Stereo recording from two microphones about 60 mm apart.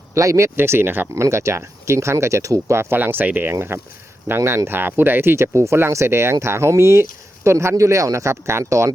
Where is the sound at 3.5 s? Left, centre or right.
Right.